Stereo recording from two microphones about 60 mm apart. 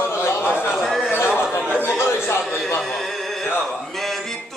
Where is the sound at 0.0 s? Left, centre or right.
Left.